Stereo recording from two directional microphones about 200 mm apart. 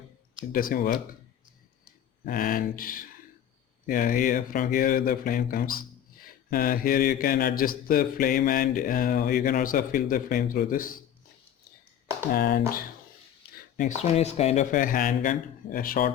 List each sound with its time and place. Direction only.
0.5 s a man's voice: 45° left (ahead or behind)
2.2 s a man's voice: 45° left (ahead or behind)
12.3 s a man's voice: 50° left (ahead or behind)
13.7 s speech: 35° left (ahead or behind)